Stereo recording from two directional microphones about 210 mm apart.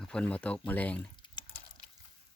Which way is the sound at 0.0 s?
5° left (ahead or behind).